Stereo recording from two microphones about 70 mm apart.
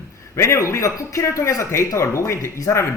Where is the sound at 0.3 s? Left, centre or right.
Left.